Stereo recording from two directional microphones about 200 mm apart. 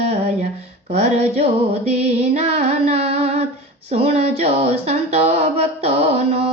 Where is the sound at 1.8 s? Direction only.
30° right (ahead or behind).